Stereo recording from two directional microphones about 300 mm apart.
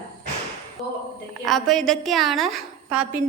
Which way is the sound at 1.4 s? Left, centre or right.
Centre.